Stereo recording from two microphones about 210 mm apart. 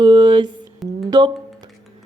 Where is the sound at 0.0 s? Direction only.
20° right (ahead or behind).